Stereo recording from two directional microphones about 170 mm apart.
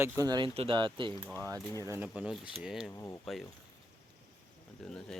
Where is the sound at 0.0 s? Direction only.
20° right (ahead or behind).